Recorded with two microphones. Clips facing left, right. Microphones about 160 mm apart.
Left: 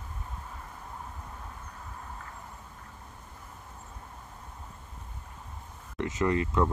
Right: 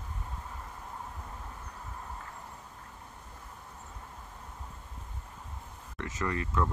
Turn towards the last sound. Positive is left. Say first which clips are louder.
# left 5 dB
turn(degrees=20)  # may be behind; listen again after turning